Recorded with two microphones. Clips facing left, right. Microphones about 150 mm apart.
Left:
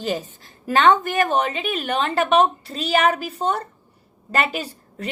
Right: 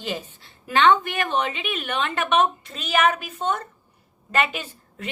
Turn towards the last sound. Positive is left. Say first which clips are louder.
# left 5 dB
turn(degrees=35)  # may be behind; listen again after turning